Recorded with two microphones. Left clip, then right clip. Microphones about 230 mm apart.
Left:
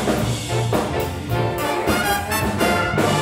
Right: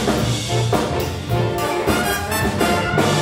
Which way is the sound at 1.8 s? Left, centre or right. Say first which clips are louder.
Even; centre.